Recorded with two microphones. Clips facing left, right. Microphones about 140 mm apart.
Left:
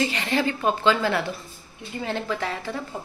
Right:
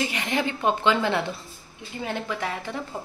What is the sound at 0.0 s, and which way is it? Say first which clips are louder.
A woman's voice: left 2 dB; 15° right (ahead or behind).